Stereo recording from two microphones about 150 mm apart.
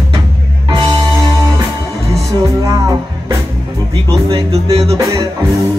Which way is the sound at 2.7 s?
25° right (ahead or behind).